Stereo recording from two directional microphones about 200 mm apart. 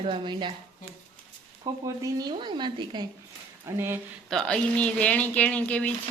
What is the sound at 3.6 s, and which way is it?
Speech, 10° right (ahead or behind).